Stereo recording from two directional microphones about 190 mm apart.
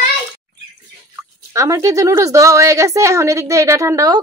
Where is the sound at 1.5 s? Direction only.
15° right (ahead or behind).